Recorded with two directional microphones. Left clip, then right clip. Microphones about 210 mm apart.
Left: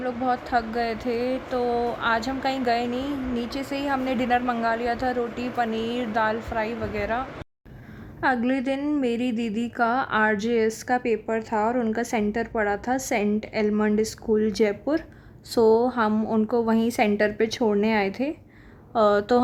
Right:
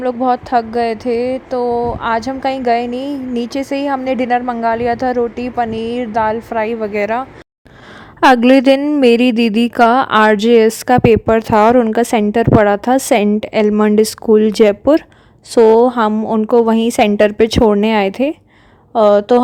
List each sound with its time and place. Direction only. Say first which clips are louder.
0.0 s speech: right 11 dB; 30° right (ahead or behind)
8.2 s speech: right 15 dB; 45° right (ahead or behind); by 19.4 s 25° right (ahead or behind)